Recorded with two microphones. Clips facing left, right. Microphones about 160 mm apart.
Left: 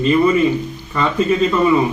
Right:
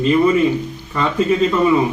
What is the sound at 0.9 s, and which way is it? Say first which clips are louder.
Speech: even; 10° right (ahead or behind).